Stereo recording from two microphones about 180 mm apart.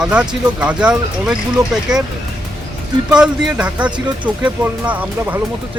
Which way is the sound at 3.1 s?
5° right (ahead or behind).